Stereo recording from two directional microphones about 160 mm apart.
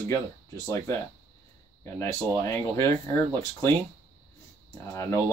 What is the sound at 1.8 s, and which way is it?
Speech, 20° left (ahead or behind).